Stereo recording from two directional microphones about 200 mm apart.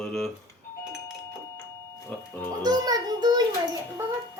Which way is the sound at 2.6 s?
20° right (ahead or behind).